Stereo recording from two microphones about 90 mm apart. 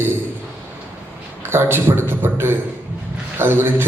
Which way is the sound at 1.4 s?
25° right (ahead or behind).